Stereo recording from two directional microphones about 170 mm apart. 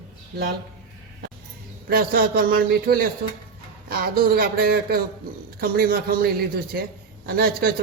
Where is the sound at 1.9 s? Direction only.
60° right (ahead or behind).